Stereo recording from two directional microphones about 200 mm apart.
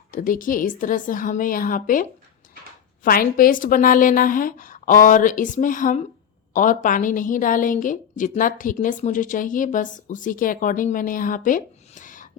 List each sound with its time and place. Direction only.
0.1 s a woman's voice: 40° left (ahead or behind)